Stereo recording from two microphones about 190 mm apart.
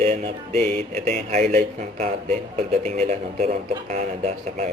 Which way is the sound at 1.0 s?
35° right (ahead or behind).